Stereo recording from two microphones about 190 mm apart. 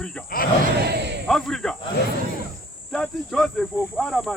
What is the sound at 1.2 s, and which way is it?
Speech, centre (ahead or behind).